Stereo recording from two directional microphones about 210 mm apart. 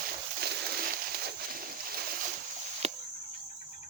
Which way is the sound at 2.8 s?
30° right (ahead or behind).